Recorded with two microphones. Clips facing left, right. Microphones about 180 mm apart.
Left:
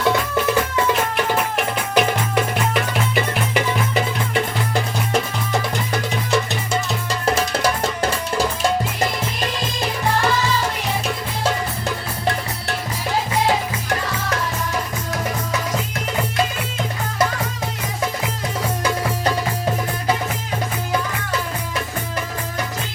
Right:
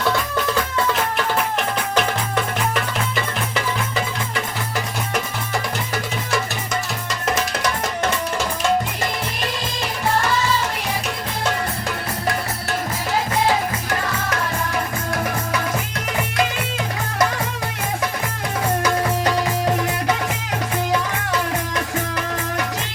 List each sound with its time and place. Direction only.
2.0 s music: 10° left (ahead or behind)
3.5 s music: 25° left (ahead or behind)